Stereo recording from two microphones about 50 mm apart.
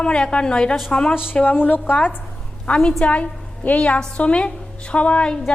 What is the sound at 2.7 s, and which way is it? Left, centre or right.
Speech, centre.